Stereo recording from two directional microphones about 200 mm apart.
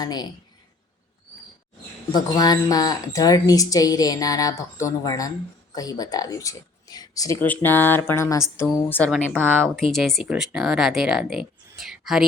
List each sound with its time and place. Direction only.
0.0 s speech: 20° left (ahead or behind)
2.1 s speech: 20° left (ahead or behind); by 12.2 s centre (ahead or behind)